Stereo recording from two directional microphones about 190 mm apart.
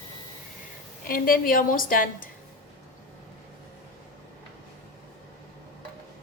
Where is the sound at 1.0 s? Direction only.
50° left (ahead or behind).